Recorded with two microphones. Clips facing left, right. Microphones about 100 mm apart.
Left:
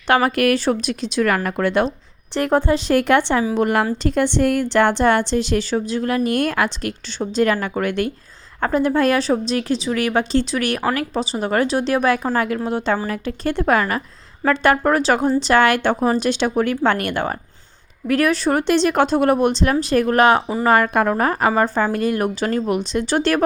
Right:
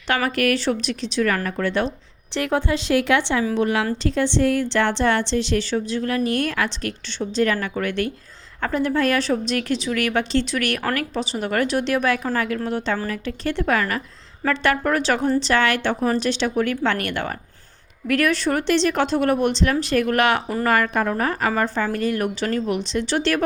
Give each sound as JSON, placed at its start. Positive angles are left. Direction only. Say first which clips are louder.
{"t": 0.3, "sound": "a woman's voice", "louder": "left 3 dB", "side_deg": 45}
{"t": 20.9, "sound": "a woman's voice", "louder": "left 4 dB", "side_deg": 50}
{"t": 21.5, "sound": "a woman's voice", "louder": "left 4 dB", "side_deg": 30}